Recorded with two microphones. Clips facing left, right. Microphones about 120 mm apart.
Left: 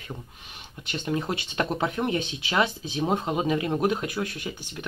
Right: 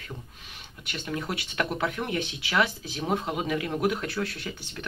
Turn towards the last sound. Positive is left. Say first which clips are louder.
# left 2 dB
turn(degrees=15)  # may be behind; listen again after turning